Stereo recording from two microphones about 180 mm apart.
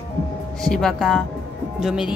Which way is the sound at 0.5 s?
Centre (ahead or behind).